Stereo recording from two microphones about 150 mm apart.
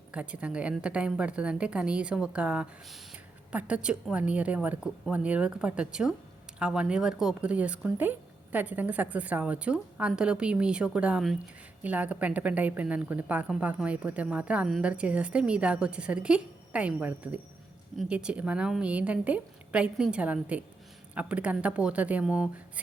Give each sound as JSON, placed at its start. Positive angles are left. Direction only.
{"t": 0.1, "sound": "a woman's voice", "side_deg": -10}